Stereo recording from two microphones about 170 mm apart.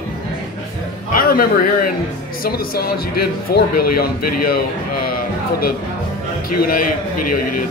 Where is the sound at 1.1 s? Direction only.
60° left (ahead or behind).